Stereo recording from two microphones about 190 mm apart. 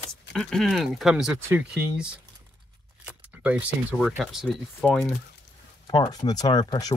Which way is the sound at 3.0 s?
5° right (ahead or behind).